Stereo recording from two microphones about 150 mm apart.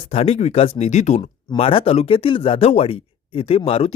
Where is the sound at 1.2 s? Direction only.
35° left (ahead or behind).